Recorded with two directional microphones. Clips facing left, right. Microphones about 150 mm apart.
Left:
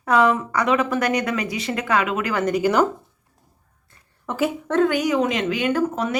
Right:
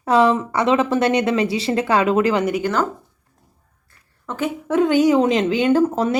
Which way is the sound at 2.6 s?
10° left (ahead or behind).